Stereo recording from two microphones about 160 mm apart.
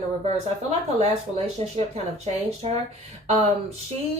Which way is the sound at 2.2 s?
40° right (ahead or behind).